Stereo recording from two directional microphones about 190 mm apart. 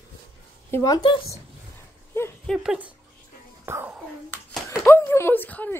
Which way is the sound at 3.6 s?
10° right (ahead or behind).